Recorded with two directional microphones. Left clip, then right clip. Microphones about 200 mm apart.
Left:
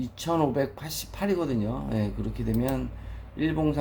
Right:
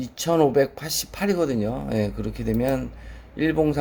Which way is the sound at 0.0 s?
50° right (ahead or behind).